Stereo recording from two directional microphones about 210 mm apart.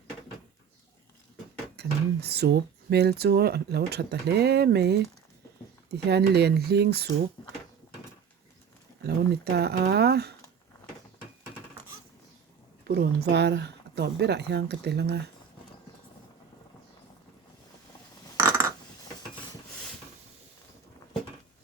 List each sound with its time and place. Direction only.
1.7 s speech: 50° right (ahead or behind)
9.0 s speech: 50° right (ahead or behind)
12.9 s speech: 50° right (ahead or behind)